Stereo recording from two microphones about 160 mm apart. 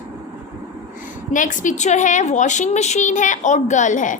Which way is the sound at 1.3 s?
55° left (ahead or behind).